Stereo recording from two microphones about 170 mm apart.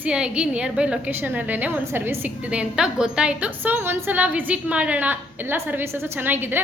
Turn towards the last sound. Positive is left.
turn(degrees=-10)  # may be behind; listen again after turning